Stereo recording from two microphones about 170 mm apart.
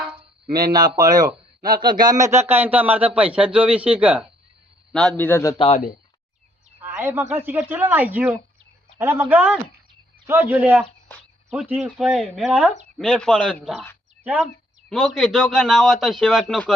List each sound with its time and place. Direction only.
0.5 s speech: 25° right (ahead or behind); by 4.3 s 10° right (ahead or behind)
4.9 s a man's voice: 5° left (ahead or behind)
5.5 s speech: 35° left (ahead or behind)
6.8 s speech: 10° right (ahead or behind); by 13.7 s 5° left (ahead or behind)
14.3 s speech: 5° right (ahead or behind)